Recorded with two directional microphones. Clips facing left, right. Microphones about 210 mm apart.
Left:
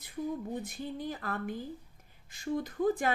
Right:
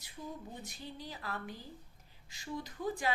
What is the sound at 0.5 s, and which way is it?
Speech, 55° left (ahead or behind).